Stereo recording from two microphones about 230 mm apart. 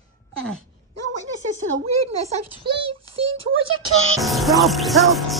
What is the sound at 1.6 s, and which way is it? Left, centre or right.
Speech, right.